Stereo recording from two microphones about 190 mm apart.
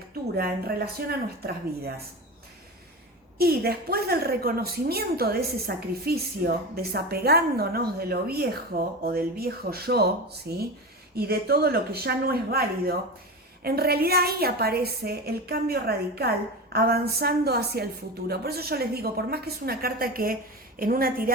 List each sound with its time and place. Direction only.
0.3 s a woman's voice: 55° right (ahead or behind)
3.3 s a woman's voice: 55° right (ahead or behind)